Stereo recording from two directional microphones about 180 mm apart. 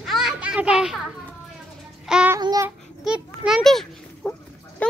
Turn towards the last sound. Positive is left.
turn(degrees=10)  # may be behind; listen again after turning